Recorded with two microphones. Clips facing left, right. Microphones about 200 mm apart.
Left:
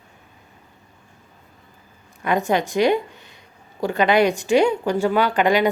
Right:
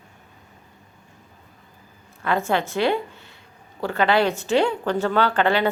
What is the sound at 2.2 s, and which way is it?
A woman's voice, 15° left (ahead or behind).